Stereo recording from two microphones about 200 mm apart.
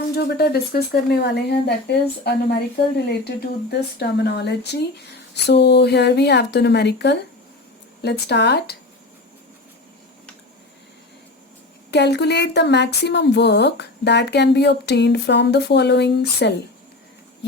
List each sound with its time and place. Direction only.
0.2 s speech: 55° left (ahead or behind)
11.9 s speech: 55° left (ahead or behind)